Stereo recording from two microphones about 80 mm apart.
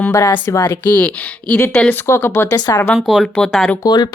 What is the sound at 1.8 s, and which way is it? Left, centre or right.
Speech, left.